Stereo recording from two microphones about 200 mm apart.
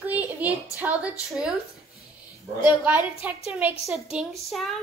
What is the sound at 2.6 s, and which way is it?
A woman's voice, 10° right (ahead or behind).